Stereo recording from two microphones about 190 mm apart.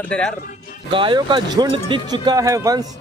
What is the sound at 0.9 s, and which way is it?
Speech, 25° right (ahead or behind).